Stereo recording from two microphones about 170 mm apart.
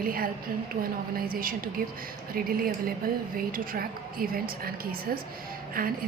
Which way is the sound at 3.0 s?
55° right (ahead or behind).